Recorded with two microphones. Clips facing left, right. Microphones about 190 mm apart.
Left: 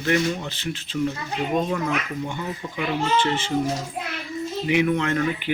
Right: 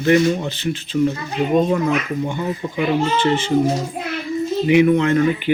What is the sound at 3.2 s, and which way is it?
Speech, centre (ahead or behind).